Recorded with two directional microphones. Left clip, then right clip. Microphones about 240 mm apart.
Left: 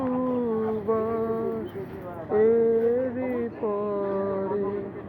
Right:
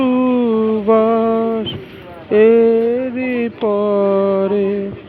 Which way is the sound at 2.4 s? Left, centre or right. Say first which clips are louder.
Right 9 dB; right.